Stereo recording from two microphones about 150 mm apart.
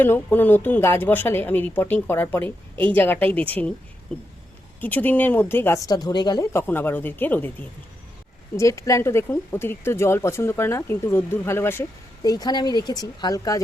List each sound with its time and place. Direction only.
0.0 s speech: 15° left (ahead or behind)
6.5 s speech: 15° left (ahead or behind)
8.5 s speech: 20° left (ahead or behind)